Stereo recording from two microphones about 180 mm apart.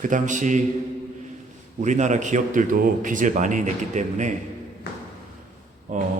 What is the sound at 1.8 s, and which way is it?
A man's voice, 40° right (ahead or behind).